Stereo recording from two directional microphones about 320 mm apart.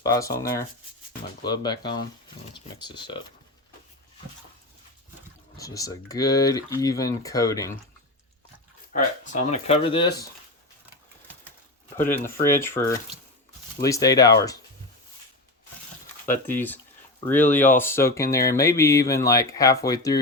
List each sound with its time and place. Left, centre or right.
0.0 s speech: centre
5.5 s speech: centre
8.9 s speech: left
11.9 s speech: centre
16.5 s speech: centre